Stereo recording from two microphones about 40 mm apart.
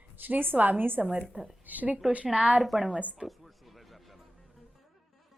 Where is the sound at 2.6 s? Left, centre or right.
Centre.